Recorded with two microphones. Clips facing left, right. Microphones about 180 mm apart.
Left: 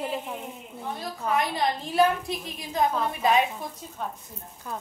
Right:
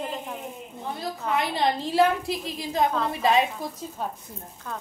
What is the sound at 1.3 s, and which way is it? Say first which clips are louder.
A woman's voice: right 2 dB; 25° right (ahead or behind).